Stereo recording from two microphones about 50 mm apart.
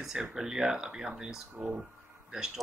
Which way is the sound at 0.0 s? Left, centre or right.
Centre.